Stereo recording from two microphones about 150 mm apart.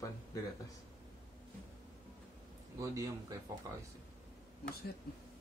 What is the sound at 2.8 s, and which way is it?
Speech, 20° right (ahead or behind).